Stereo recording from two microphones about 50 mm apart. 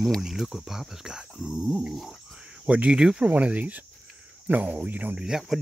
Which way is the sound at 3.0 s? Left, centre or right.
Centre.